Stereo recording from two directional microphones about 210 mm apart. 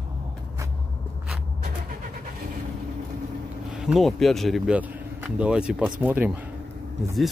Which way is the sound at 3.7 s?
5° right (ahead or behind).